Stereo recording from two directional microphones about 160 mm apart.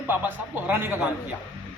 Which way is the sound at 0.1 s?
10° right (ahead or behind).